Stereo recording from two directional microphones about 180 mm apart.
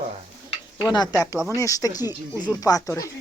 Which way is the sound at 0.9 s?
20° left (ahead or behind).